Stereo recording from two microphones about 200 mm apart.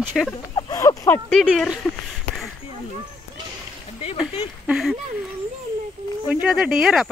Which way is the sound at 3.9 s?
30° left (ahead or behind).